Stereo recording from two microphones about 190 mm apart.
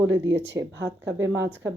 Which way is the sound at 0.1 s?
70° right (ahead or behind).